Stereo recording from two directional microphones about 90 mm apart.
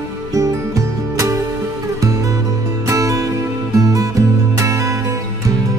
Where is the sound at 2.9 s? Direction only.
40° right (ahead or behind).